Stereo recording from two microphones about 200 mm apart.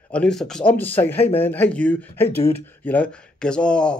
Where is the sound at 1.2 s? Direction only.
30° left (ahead or behind).